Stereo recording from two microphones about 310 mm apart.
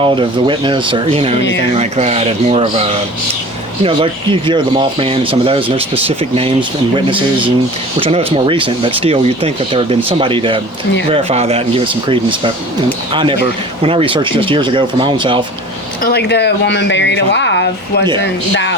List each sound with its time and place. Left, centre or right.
0.0 s speech: centre
3.8 s speech: centre
16.0 s speech: left